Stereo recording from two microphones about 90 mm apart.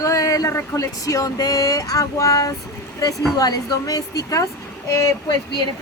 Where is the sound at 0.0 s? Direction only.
40° left (ahead or behind).